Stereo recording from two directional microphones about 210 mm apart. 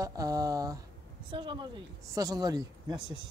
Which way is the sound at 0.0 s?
15° right (ahead or behind).